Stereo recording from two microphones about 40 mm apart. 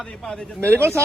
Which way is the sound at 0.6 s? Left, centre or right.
Right.